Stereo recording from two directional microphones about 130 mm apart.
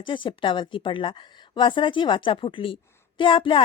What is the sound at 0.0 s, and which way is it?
A woman's voice, 40° left (ahead or behind).